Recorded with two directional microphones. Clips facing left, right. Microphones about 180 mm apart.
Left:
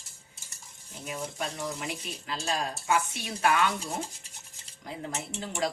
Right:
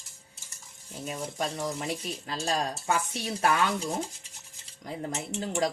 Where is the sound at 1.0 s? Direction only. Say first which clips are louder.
Right 2 dB; 40° right (ahead or behind).